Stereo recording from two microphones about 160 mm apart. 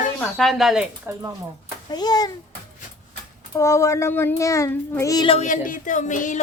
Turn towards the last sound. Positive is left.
turn(degrees=50)  # may be behind; listen again after turning